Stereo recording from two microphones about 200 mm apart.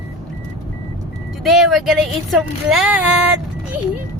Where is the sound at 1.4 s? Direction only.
Centre (ahead or behind).